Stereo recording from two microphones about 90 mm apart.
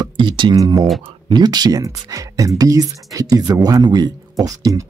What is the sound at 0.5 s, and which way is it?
Speech, 40° right (ahead or behind).